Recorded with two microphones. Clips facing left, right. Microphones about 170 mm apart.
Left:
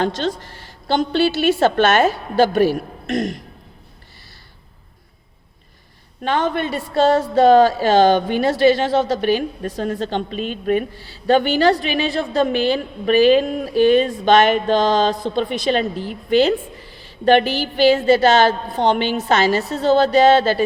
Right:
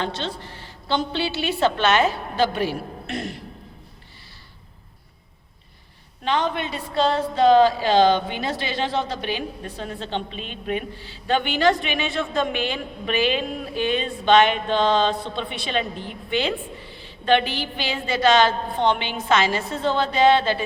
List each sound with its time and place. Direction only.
0.0 s a woman's voice: 45° left (ahead or behind)
6.2 s a woman's voice: 50° left (ahead or behind)